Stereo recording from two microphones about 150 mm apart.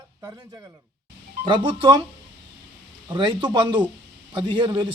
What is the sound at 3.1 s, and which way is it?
Speech, 35° right (ahead or behind).